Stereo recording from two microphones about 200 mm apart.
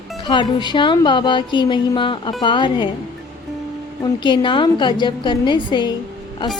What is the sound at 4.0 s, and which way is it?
Music, 25° left (ahead or behind).